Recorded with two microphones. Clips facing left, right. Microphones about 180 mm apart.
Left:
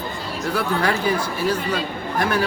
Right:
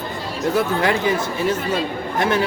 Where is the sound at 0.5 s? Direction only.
20° right (ahead or behind).